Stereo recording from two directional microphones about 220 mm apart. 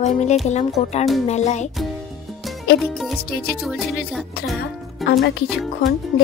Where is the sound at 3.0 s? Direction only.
Centre (ahead or behind).